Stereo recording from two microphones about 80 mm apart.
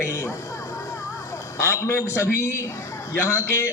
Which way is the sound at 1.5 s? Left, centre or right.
Left.